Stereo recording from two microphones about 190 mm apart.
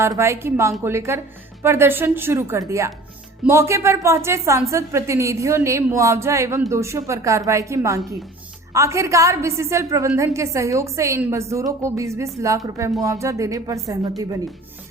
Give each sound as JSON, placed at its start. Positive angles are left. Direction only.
{"t": 0.0, "sound": "a woman's voice", "side_deg": -15}